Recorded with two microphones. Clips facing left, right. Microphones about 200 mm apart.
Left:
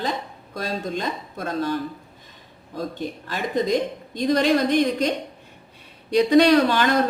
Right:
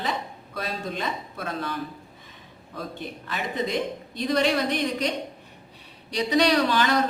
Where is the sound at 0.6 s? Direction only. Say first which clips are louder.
Left 4 dB; 40° left (ahead or behind).